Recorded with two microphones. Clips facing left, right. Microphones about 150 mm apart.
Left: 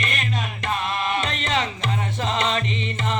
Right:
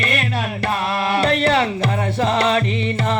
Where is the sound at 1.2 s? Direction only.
40° right (ahead or behind).